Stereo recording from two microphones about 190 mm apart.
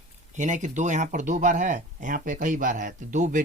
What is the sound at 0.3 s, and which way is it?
Speech, 40° right (ahead or behind).